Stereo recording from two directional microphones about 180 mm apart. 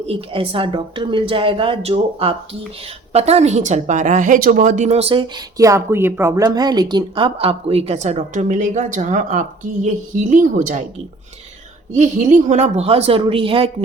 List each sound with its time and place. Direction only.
0.1 s a woman's voice: 30° right (ahead or behind)
5.5 s a woman's voice: 20° right (ahead or behind); by 10.8 s 45° right (ahead or behind)
11.9 s a woman's voice: 45° right (ahead or behind)